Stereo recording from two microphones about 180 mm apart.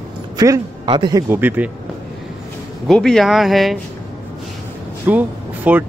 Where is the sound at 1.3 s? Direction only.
10° right (ahead or behind).